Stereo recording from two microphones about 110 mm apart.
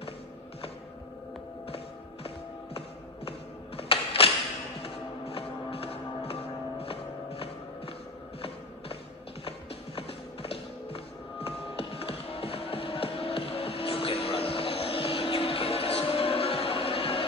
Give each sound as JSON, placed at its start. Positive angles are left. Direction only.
{"t": 3.3, "sound": "music", "side_deg": 60}
{"t": 9.9, "sound": "music", "side_deg": 60}